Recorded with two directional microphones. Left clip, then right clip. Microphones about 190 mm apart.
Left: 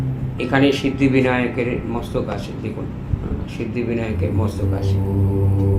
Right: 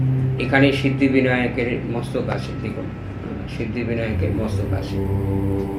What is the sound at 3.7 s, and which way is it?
Speech, 10° left (ahead or behind).